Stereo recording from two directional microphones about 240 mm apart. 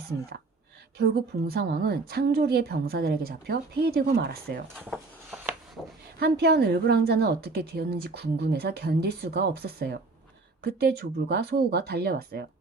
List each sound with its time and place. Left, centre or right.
0.9 s a woman's voice: right
4.9 s a sound: centre
6.1 s a woman's voice: right